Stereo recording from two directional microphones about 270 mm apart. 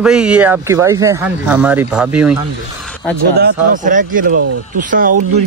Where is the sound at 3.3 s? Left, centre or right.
Right.